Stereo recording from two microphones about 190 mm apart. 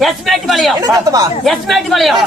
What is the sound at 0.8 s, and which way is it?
Speech, 20° right (ahead or behind).